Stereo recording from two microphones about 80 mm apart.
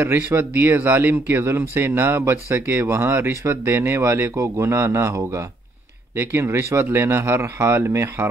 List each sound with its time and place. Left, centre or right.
0.0 s speech: right